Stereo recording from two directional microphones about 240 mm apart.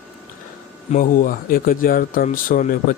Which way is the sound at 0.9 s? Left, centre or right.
Left.